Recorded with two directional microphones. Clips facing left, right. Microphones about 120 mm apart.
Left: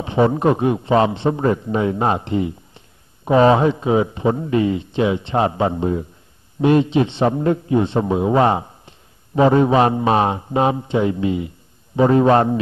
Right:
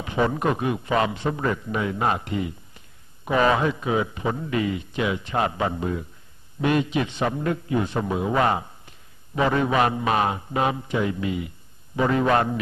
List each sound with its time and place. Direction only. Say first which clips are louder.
0.0 s a man's voice: left 7 dB; 30° left (ahead or behind)